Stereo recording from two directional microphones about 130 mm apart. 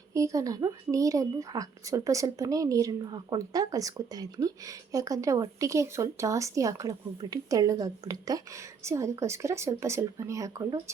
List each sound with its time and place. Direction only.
0.1 s speech: 25° right (ahead or behind)